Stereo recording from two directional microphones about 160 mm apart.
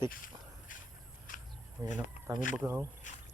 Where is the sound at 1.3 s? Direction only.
60° left (ahead or behind).